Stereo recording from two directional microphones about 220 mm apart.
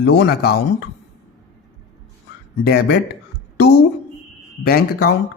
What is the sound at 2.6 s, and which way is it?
Speech, 45° left (ahead or behind).